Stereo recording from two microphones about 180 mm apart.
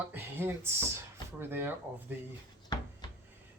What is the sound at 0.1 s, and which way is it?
Speech, 10° right (ahead or behind).